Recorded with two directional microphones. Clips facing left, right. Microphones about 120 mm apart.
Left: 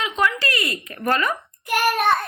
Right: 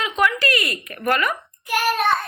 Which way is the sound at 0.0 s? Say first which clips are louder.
Right 2 dB; 25° left (ahead or behind).